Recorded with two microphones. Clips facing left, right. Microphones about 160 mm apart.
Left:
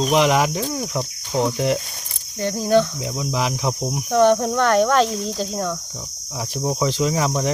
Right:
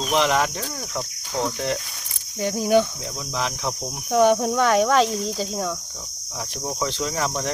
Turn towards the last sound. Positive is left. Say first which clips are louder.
# left 5 dB
turn(degrees=10)  # may be behind; listen again after turning